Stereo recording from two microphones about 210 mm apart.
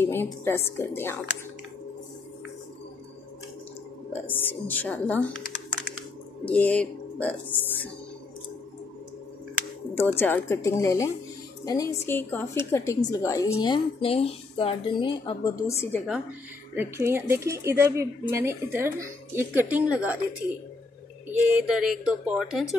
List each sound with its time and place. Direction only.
0.0 s a woman's voice: 10° left (ahead or behind)
4.1 s a woman's voice: 10° left (ahead or behind)
6.4 s speech: 5° left (ahead or behind)
9.9 s a woman's voice: 10° left (ahead or behind)
16.7 s speech: 10° right (ahead or behind)
21.3 s speech: 5° right (ahead or behind)